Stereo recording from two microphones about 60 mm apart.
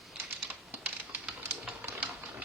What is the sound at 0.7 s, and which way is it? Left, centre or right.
Typing, right.